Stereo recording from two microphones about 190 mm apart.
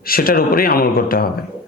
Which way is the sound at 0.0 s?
50° left (ahead or behind).